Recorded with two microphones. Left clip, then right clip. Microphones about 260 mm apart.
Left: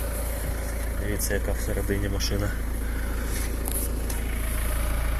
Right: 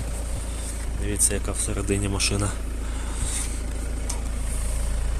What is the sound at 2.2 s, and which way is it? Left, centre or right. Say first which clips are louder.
Speech: right 4 dB; right.